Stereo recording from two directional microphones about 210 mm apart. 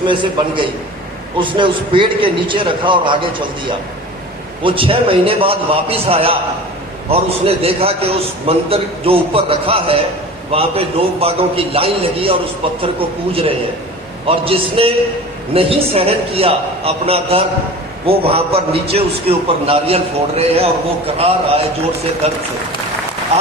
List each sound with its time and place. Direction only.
0.0 s a man's voice: 25° right (ahead or behind)
4.6 s a man's voice: 25° right (ahead or behind)
14.3 s a man's voice: 25° right (ahead or behind)